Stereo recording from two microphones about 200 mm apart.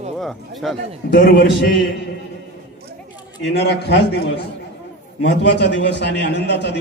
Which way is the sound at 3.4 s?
55° left (ahead or behind).